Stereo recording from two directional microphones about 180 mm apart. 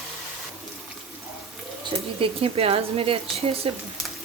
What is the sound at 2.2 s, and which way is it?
Speech, 30° right (ahead or behind).